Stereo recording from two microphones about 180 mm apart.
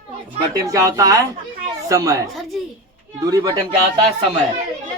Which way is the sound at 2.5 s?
Centre (ahead or behind).